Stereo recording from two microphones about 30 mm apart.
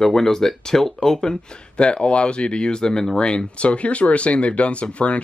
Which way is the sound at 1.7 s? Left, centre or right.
Left.